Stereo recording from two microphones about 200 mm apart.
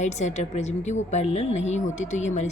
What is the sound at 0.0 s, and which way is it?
A woman's voice, 35° left (ahead or behind).